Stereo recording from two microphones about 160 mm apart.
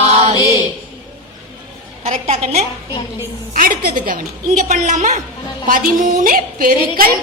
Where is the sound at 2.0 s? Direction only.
40° right (ahead or behind).